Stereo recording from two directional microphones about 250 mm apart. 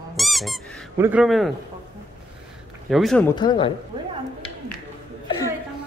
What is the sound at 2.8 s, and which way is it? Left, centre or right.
Speech, centre.